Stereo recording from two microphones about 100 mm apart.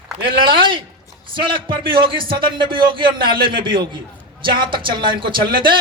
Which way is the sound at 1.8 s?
55° right (ahead or behind).